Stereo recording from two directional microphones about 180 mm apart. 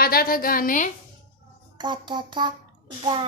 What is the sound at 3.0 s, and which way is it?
Speech, 30° right (ahead or behind).